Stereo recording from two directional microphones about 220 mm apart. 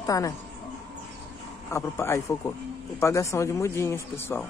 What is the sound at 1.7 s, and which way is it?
Speech, 10° left (ahead or behind).